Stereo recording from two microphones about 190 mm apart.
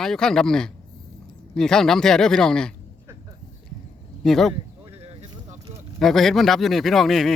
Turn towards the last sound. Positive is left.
turn(degrees=0)  # may be behind; listen again after turning